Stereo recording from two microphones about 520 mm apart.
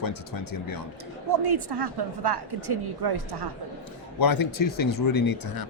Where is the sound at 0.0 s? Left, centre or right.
Left.